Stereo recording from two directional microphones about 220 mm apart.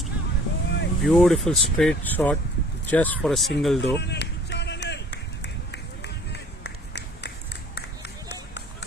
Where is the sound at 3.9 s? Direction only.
50° left (ahead or behind).